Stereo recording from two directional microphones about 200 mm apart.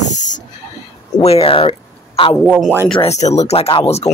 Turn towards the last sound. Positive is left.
turn(degrees=30)  # may be behind; listen again after turning